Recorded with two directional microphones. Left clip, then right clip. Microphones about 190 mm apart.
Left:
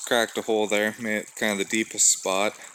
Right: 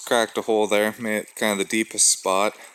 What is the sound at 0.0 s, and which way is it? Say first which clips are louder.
Speech: right 2 dB; 25° right (ahead or behind).